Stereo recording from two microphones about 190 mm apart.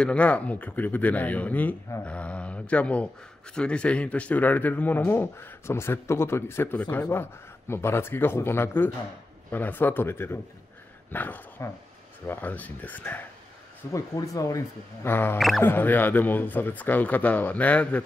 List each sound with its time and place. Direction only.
0.0 s speech: 5° left (ahead or behind)
15.3 s speech: centre (ahead or behind)
15.6 s speech: 10° left (ahead or behind)